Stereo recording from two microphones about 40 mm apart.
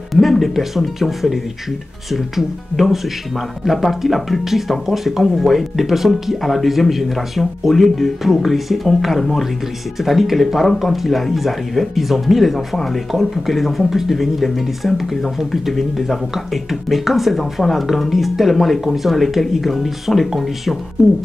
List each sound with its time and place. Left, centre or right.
0.1 s speech: centre